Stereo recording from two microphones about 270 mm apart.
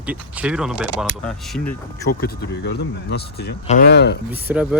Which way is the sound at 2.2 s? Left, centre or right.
Left.